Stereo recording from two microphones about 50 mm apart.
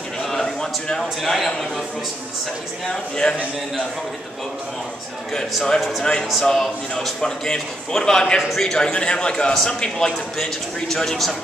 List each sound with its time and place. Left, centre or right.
0.2 s a sound: centre
1.2 s speech: centre
2.9 s a man's voice: centre
5.8 s a man's voice: centre